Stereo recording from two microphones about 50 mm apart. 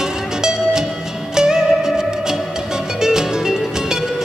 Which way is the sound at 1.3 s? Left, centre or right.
Centre.